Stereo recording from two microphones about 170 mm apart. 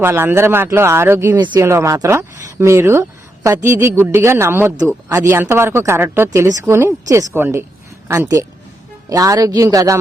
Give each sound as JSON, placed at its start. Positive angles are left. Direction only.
{"t": 0.0, "sound": "a man's voice", "side_deg": -15}